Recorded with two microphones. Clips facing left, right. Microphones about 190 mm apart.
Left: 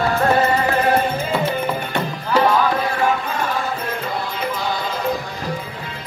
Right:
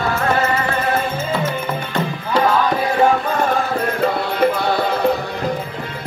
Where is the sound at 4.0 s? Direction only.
65° right (ahead or behind).